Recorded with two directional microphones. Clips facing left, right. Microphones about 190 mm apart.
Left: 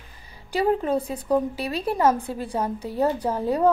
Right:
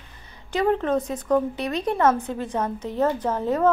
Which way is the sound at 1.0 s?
30° left (ahead or behind).